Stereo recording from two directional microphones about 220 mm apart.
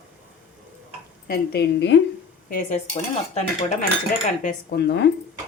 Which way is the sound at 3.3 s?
35° left (ahead or behind).